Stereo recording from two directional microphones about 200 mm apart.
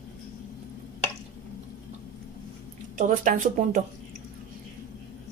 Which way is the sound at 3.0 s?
40° right (ahead or behind).